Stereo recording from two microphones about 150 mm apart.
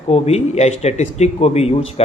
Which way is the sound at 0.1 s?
45° left (ahead or behind).